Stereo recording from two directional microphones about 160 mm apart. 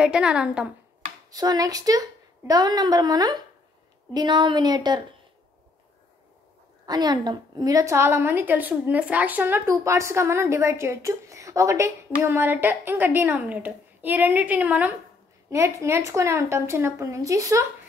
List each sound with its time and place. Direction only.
0.0 s a woman's voice: 5° right (ahead or behind)
1.3 s a woman's voice: 25° right (ahead or behind)
6.9 s a woman's voice: 25° right (ahead or behind)